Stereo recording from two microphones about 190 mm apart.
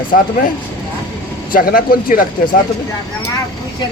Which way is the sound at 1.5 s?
50° left (ahead or behind).